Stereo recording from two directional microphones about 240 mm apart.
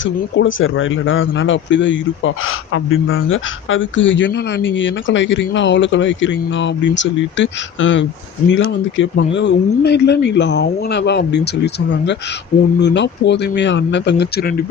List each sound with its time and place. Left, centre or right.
0.0 s speech: left